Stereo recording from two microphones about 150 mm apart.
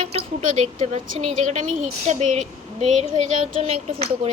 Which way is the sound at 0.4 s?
55° right (ahead or behind).